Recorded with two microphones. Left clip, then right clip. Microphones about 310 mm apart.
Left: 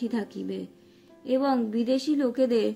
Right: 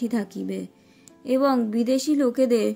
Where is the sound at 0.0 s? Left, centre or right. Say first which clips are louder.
Right 3 dB; right.